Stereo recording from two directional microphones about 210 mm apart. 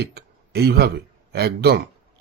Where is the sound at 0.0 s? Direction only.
50° right (ahead or behind).